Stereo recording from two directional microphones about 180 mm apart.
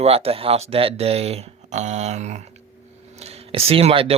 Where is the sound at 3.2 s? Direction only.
35° right (ahead or behind).